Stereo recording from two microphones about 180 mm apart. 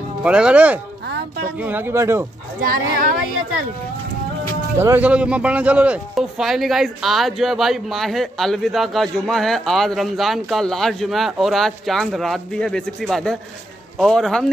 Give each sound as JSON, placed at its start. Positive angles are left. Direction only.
{"t": 0.2, "sound": "speech", "side_deg": -5}
{"t": 2.6, "sound": "speech", "side_deg": -50}
{"t": 4.7, "sound": "a man's voice", "side_deg": -10}